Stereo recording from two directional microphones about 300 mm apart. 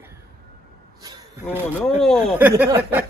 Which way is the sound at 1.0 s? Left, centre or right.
Centre.